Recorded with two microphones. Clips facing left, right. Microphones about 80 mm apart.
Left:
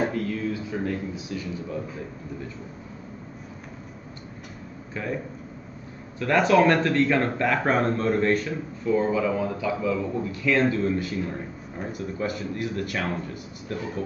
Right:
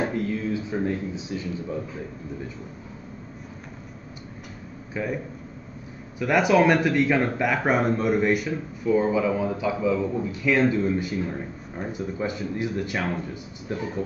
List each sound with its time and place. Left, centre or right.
0.1 s speech: right
5.0 s speech: centre
6.1 s speech: centre